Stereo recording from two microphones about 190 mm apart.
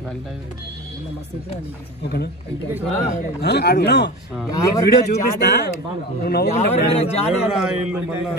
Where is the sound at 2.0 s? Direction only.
60° left (ahead or behind).